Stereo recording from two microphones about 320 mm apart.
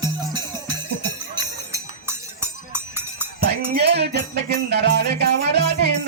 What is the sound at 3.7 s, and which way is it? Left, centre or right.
Music, right.